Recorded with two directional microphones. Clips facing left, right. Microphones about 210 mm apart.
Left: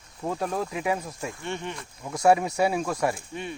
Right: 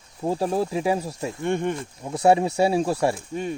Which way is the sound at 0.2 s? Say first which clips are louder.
Right 5 dB; 30° right (ahead or behind).